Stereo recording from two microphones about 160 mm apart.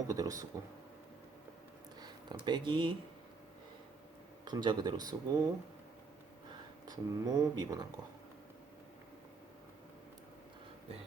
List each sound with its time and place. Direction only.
0.1 s speech: 20° right (ahead or behind)
2.0 s speech: 25° right (ahead or behind)
4.4 s speech: 25° right (ahead or behind)
6.8 s speech: 25° right (ahead or behind)